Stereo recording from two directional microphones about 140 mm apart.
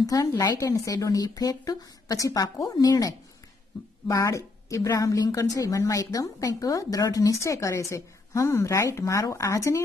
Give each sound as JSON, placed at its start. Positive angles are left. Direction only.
{"t": 0.0, "sound": "a woman's voice", "side_deg": 25}